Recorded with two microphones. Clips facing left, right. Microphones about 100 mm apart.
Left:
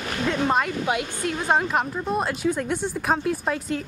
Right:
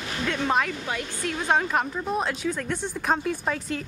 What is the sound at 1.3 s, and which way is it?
Speech, 5° left (ahead or behind).